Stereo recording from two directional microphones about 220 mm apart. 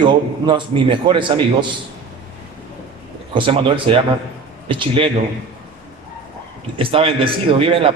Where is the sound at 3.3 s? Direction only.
25° right (ahead or behind).